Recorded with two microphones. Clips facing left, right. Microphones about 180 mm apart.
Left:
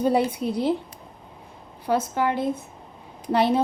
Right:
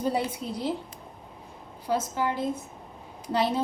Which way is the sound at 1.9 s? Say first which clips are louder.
Left 4 dB; 65° left (ahead or behind).